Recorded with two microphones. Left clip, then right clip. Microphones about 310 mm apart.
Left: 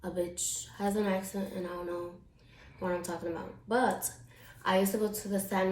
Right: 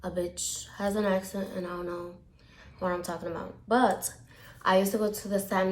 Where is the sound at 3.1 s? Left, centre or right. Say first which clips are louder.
Right 2 dB; centre.